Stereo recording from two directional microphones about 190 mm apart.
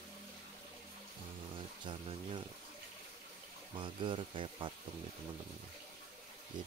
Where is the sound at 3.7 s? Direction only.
25° right (ahead or behind).